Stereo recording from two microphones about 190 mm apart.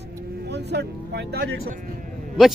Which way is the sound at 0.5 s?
60° right (ahead or behind).